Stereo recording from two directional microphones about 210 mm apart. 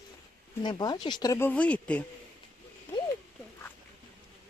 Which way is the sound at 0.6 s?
20° left (ahead or behind).